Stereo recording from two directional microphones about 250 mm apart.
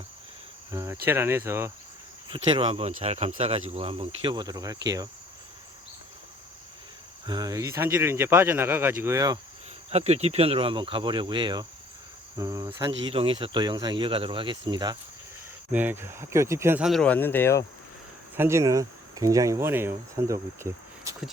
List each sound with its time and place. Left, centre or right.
0.7 s insect: centre
1.0 s speech: centre
2.3 s cricket: right
3.7 s speech: right
7.3 s speech: centre
9.9 s cricket: right
12.4 s speech: centre
13.1 s cricket: right
14.7 s speech: centre
18.3 s speech: centre